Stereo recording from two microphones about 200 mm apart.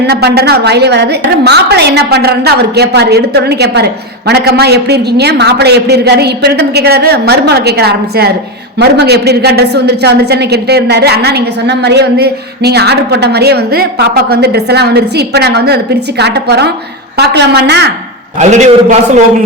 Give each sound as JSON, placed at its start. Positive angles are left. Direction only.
{"t": 0.0, "sound": "a woman's voice", "side_deg": -55}
{"t": 18.3, "sound": "a man's voice", "side_deg": -35}